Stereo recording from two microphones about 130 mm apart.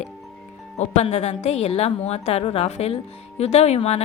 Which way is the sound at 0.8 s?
55° left (ahead or behind).